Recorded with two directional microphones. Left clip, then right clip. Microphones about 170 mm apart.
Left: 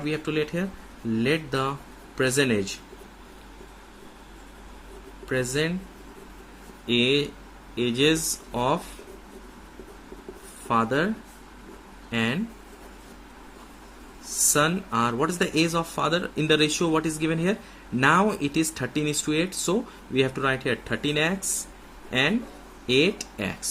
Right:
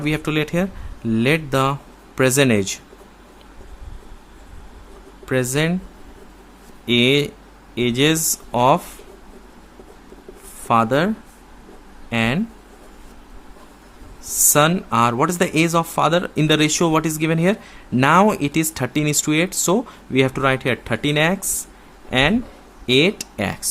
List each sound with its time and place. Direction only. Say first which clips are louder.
0.0 s speech: right 5 dB; 50° right (ahead or behind)
5.3 s speech: right 6 dB; 45° right (ahead or behind)
6.8 s speech: right 6 dB; 45° right (ahead or behind)
10.7 s speech: right 7 dB; 40° right (ahead or behind)
12.1 s speech: right 6 dB; 40° right (ahead or behind)
14.5 s speech: right 7 dB; 40° right (ahead or behind)